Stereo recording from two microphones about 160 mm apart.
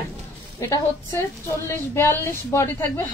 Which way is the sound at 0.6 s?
20° left (ahead or behind).